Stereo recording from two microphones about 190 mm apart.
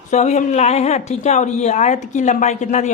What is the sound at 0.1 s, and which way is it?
A woman's voice, 40° left (ahead or behind).